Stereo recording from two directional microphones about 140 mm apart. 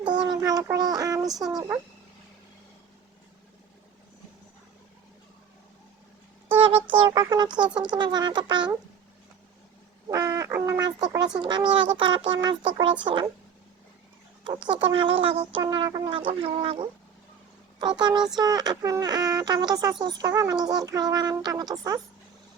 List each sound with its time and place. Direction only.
0.0 s child singing: 30° right (ahead or behind)
1.5 s speech: 20° right (ahead or behind)
7.1 s a sound: 25° right (ahead or behind)
7.9 s speech: 30° right (ahead or behind)
10.1 s fowl: 25° right (ahead or behind)
11.3 s speech: 30° right (ahead or behind)
14.4 s speech: 35° right (ahead or behind)
15.6 s speech: 30° right (ahead or behind)
18.3 s speech: 30° right (ahead or behind)